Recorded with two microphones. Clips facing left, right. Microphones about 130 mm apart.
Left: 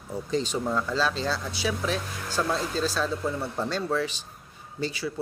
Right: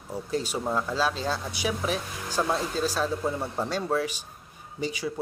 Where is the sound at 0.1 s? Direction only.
10° right (ahead or behind).